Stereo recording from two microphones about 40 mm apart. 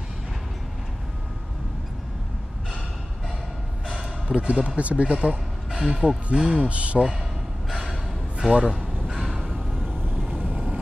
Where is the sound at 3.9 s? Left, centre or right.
Right.